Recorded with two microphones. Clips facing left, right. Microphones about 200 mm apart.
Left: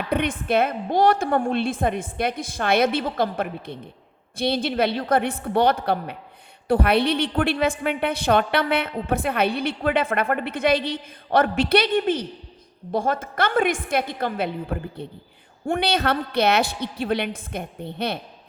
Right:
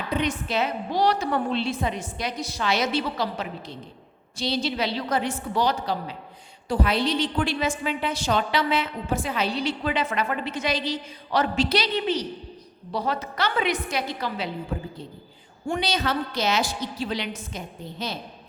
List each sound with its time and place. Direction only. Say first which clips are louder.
0.1 s a woman's voice: left 4 dB; 55° left (ahead or behind)